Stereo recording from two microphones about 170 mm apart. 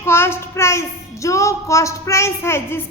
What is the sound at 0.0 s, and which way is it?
A child's voice, 15° left (ahead or behind).